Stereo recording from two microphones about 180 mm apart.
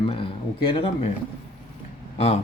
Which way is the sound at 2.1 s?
35° left (ahead or behind).